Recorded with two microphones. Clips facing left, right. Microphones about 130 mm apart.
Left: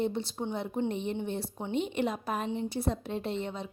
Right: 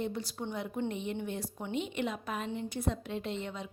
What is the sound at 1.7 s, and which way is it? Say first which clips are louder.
A woman's voice: left 4 dB; 35° left (ahead or behind).